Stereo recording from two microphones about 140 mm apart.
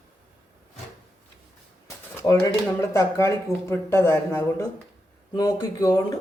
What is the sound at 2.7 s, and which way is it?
Speech, 20° left (ahead or behind).